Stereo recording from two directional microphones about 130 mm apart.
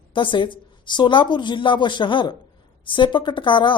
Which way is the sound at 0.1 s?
40° left (ahead or behind).